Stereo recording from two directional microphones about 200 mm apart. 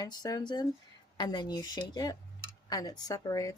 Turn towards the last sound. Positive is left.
turn(degrees=15)  # may be behind; listen again after turning